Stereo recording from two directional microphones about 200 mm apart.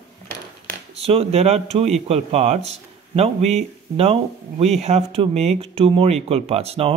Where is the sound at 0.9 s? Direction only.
30° right (ahead or behind).